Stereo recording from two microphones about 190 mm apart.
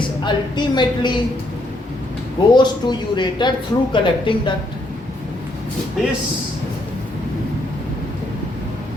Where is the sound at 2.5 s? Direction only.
25° left (ahead or behind).